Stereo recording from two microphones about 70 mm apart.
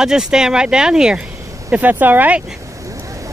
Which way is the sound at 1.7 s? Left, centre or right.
Right.